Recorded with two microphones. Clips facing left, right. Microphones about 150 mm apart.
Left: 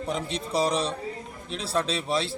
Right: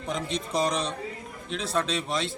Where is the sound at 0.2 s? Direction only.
35° left (ahead or behind).